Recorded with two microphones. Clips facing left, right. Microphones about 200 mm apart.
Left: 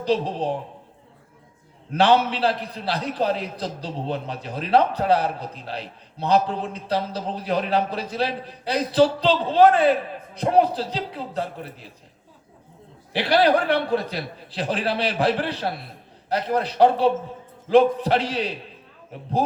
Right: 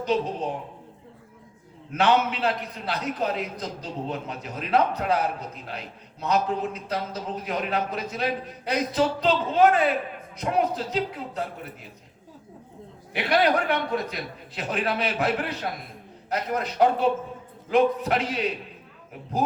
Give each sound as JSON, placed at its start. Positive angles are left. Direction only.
{"t": 0.0, "sound": "a man's voice", "side_deg": 30}
{"t": 1.9, "sound": "a man's voice", "side_deg": 30}
{"t": 13.1, "sound": "a man's voice", "side_deg": 30}